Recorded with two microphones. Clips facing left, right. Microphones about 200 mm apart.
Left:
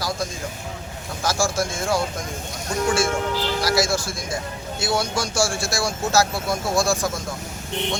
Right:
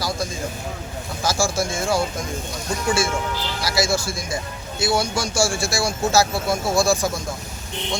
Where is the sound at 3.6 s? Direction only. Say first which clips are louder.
Right 1 dB; centre (ahead or behind).